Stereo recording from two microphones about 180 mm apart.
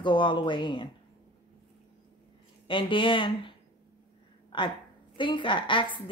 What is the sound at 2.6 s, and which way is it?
Speech, 30° left (ahead or behind).